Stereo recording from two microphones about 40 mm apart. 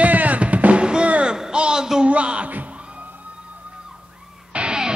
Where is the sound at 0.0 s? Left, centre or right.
Right.